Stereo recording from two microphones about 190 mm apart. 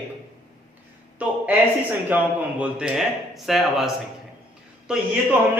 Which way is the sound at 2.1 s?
10° right (ahead or behind).